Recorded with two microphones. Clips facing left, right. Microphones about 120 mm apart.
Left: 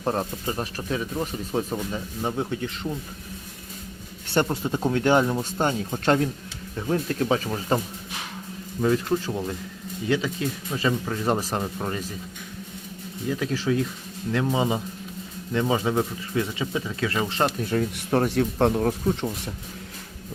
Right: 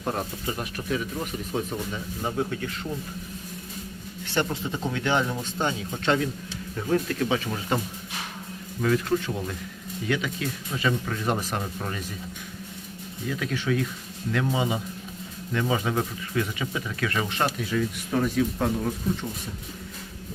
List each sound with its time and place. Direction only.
0.0 s speech: 30° left (ahead or behind)
4.4 s speech: 40° left (ahead or behind)
6.8 s speech: 30° left (ahead or behind)
8.8 s speech: 25° left (ahead or behind)
11.6 s speech: 25° left (ahead or behind)
13.2 s speech: 30° left (ahead or behind)
17.6 s speech: 50° left (ahead or behind)
18.3 s speech: 65° left (ahead or behind)